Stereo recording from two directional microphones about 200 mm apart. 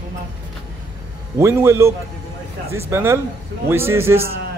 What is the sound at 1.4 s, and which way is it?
A man's voice, 15° right (ahead or behind).